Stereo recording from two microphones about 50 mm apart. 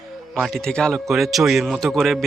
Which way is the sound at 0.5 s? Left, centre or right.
Centre.